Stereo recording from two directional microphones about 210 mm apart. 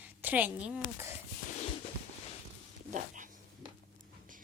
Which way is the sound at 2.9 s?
40° right (ahead or behind).